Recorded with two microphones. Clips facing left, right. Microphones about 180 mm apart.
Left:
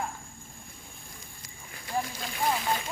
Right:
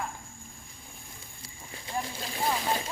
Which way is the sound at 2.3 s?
30° right (ahead or behind).